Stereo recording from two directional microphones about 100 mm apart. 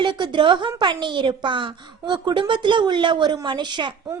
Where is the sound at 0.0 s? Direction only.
50° right (ahead or behind).